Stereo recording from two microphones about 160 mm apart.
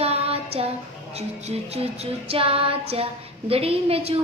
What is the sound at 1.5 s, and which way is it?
A woman's voice, 40° right (ahead or behind).